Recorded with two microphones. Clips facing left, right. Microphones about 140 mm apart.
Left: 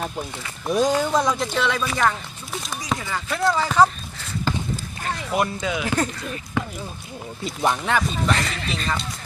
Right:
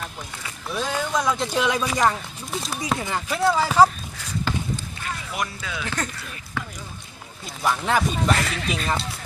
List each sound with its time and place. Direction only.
0.7 s speech: 40° left (ahead or behind)
1.2 s speech: centre (ahead or behind)
1.5 s speech: 10° right (ahead or behind)
3.3 s speech: 10° right (ahead or behind)
5.0 s music: 30° left (ahead or behind)
5.5 s speech: 20° left (ahead or behind)
6.6 s basketball bounce: 15° left (ahead or behind)
7.9 s speech: 5° right (ahead or behind)